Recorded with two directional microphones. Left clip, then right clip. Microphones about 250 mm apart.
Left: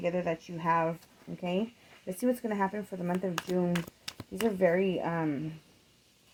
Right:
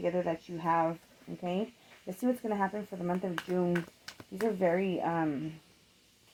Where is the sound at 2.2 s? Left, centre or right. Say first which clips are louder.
Left 1 dB; left.